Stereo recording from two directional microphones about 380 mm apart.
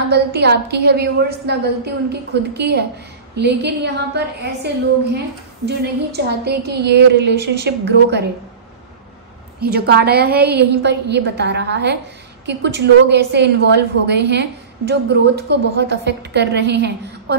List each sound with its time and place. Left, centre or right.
0.1 s a woman's voice: right
5.7 s a woman's voice: right
9.6 s a woman's voice: right